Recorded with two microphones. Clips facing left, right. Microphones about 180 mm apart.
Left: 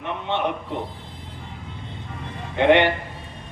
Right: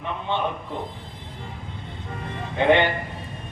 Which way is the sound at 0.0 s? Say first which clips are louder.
Left 1 dB; 70° left (ahead or behind).